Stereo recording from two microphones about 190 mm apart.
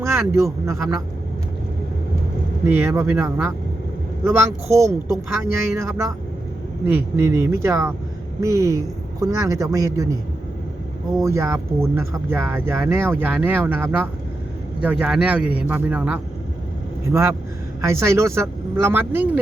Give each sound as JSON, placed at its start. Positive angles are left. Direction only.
{"t": 0.0, "sound": "speech", "side_deg": -15}
{"t": 2.6, "sound": "speech", "side_deg": -10}
{"t": 11.2, "sound": "speech", "side_deg": -15}